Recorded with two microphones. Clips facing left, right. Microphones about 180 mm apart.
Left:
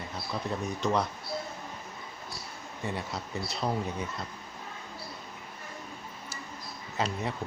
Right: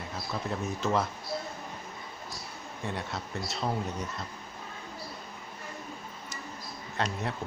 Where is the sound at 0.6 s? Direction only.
Centre (ahead or behind).